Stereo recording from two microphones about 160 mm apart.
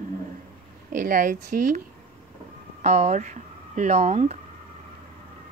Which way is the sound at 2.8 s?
45° right (ahead or behind).